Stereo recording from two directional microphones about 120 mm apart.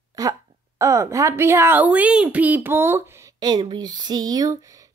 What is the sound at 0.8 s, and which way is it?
A woman's voice, 25° right (ahead or behind).